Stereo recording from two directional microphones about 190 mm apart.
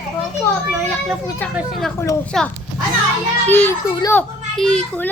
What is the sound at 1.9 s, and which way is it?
Speech, 15° left (ahead or behind).